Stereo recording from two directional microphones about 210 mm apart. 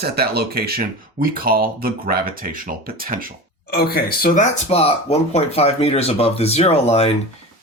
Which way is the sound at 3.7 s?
45° left (ahead or behind).